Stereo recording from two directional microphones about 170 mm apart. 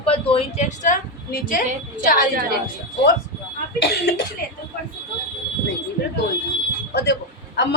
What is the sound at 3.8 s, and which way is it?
Speech, 65° left (ahead or behind).